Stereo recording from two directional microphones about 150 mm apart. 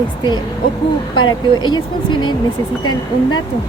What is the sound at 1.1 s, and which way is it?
Speech, 30° left (ahead or behind).